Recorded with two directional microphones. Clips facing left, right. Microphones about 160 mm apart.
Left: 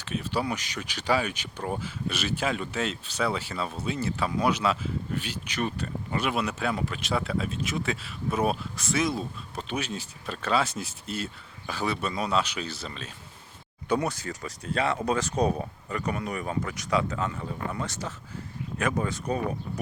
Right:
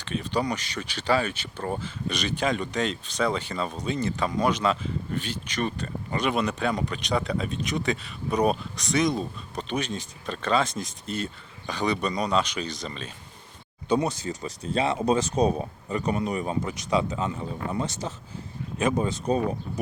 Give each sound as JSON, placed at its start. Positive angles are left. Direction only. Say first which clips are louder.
{"t": 0.0, "sound": "speech", "louder": "right 2 dB", "side_deg": 5}
{"t": 13.8, "sound": "speech", "louder": "right 3 dB", "side_deg": -20}